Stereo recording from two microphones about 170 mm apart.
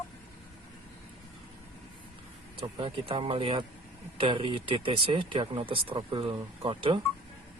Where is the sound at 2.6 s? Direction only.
35° right (ahead or behind).